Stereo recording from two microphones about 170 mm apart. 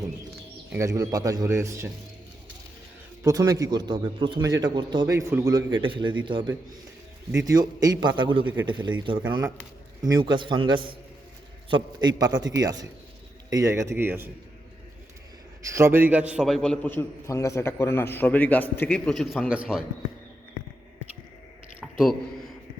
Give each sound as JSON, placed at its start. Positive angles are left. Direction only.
{"t": 0.7, "sound": "a man's voice", "side_deg": -20}
{"t": 3.2, "sound": "a man's voice", "side_deg": -20}
{"t": 15.7, "sound": "a man's voice", "side_deg": -15}
{"t": 21.8, "sound": "a sound", "side_deg": 0}